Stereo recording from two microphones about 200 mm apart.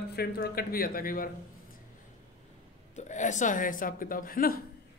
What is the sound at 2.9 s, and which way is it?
A man's voice, 40° left (ahead or behind).